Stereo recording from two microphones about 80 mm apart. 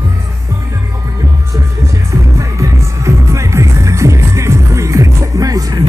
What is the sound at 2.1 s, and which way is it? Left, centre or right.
Music, right.